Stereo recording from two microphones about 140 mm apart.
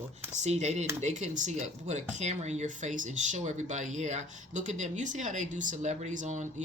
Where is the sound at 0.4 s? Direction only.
50° right (ahead or behind).